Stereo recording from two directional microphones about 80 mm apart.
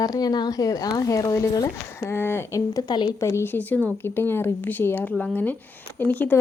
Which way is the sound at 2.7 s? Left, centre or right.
Left.